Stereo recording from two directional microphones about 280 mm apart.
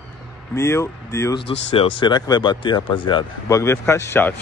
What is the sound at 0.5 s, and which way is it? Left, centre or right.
Speech, centre.